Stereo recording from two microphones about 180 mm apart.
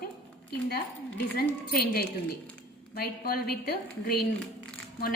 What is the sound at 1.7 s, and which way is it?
A woman's voice, 60° left (ahead or behind).